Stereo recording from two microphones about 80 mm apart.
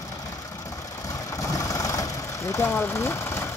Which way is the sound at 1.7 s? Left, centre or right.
Left.